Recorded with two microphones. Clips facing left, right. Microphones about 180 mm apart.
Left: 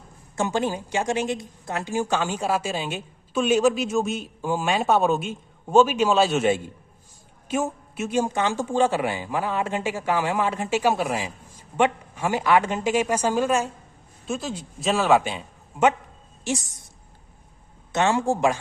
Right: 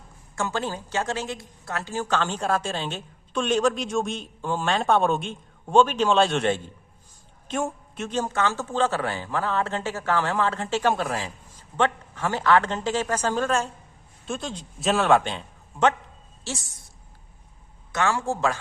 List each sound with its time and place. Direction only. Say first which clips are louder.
0.3 s a woman's voice: left 4 dB; 15° left (ahead or behind)
17.9 s a woman's voice: left 4 dB; 20° left (ahead or behind)